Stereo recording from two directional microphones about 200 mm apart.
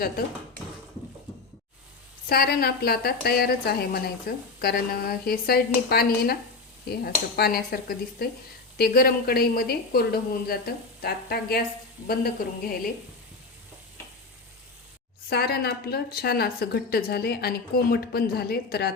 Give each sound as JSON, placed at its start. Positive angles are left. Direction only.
{"t": 2.3, "sound": "a woman's voice", "side_deg": 50}
{"t": 15.3, "sound": "a woman's voice", "side_deg": 50}